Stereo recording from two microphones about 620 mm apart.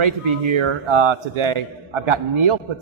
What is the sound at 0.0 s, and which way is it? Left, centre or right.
Speech, right.